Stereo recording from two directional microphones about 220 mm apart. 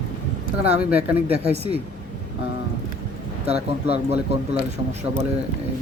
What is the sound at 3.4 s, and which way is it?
Speech, 30° right (ahead or behind).